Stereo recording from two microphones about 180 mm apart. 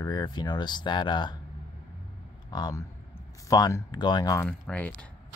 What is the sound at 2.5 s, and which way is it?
Speech, 25° left (ahead or behind).